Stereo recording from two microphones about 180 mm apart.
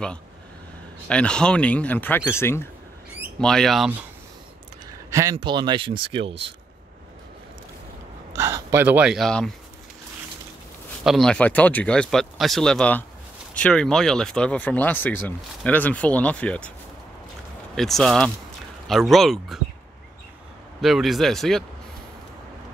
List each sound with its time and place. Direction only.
1.0 s speech: 5° left (ahead or behind)
3.3 s speech: 5° left (ahead or behind)
5.1 s speech: 20° right (ahead or behind)
8.3 s speech: 15° right (ahead or behind); by 9.5 s centre (ahead or behind)
11.1 s speech: 5° left (ahead or behind)
17.7 s speech: centre (ahead or behind)
20.8 s speech: centre (ahead or behind)